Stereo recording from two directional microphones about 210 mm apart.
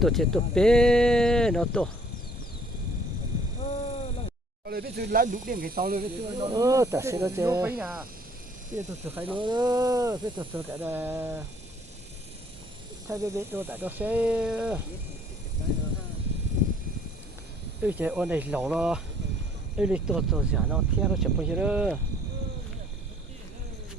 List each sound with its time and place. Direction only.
0.0 s speech: centre (ahead or behind)
3.6 s a sound: 25° left (ahead or behind)
4.6 s speech: 50° right (ahead or behind)
6.5 s speech: 15° right (ahead or behind)
9.4 s speech: 20° right (ahead or behind)
13.1 s speech: 15° right (ahead or behind)
17.8 s speech: 10° right (ahead or behind)